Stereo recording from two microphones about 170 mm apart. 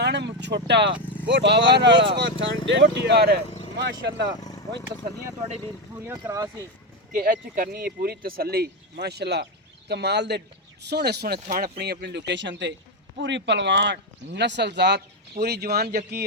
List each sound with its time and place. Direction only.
0.0 s vehicle: 90° right
0.4 s speech: 90° right; by 3.4 s 70° right (ahead or behind)
3.8 s speech: 90° right
4.4 s a sound: 20° left (ahead or behind)
6.1 s speech: 15° right (ahead or behind)
7.1 s speech: 55° right (ahead or behind)